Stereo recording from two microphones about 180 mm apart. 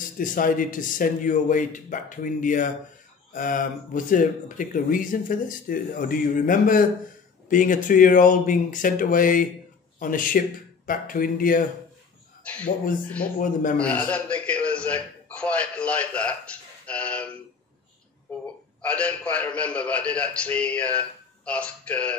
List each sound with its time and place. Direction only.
0.2 s speech: 50° left (ahead or behind)
12.4 s speech: 5° left (ahead or behind)
13.4 s speech: 50° left (ahead or behind)
13.7 s a man's voice: 5° left (ahead or behind)
18.8 s a man's voice: 5° left (ahead or behind)